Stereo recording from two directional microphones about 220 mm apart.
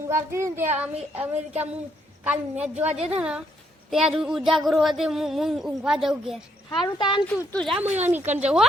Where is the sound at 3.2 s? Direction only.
5° right (ahead or behind).